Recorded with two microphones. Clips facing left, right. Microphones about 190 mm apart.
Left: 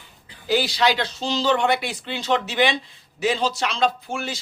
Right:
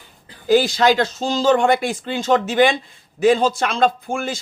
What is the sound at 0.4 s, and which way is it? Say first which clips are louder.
A man's voice: right 6 dB; 45° right (ahead or behind).